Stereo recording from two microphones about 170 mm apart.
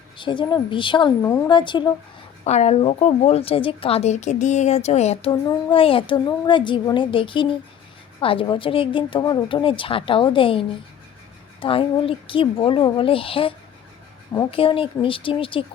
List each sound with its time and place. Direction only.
0.2 s a woman's voice: 30° left (ahead or behind)
2.4 s a woman's voice: 40° left (ahead or behind)
14.5 s a woman's voice: 30° left (ahead or behind)